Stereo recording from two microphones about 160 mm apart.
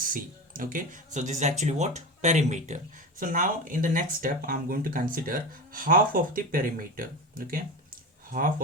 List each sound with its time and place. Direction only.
0.0 s speech: 60° right (ahead or behind)